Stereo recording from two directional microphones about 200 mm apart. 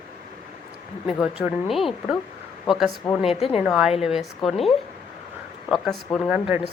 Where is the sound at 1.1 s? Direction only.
5° right (ahead or behind).